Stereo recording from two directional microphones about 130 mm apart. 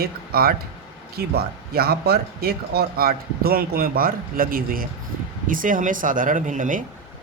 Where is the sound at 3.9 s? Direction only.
90° right.